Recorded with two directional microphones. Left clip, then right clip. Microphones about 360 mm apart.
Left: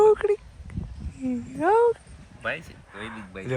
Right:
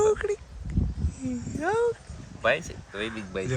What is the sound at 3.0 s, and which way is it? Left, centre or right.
Speech, right.